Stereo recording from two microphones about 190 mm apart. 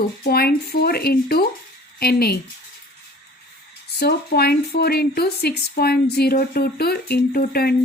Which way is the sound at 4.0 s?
55° left (ahead or behind).